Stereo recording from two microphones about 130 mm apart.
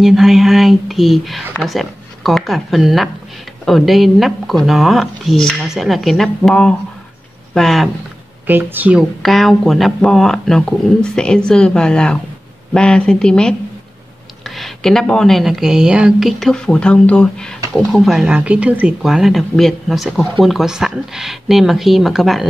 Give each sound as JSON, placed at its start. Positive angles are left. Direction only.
{"t": 0.0, "sound": "speech", "side_deg": 0}
{"t": 8.5, "sound": "speech", "side_deg": -15}
{"t": 9.2, "sound": "speech", "side_deg": 0}